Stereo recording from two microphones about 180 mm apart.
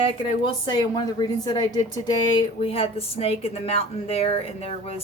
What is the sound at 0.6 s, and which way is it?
A woman's voice, 25° left (ahead or behind).